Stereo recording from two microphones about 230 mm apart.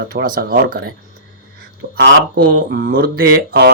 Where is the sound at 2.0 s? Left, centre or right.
Right.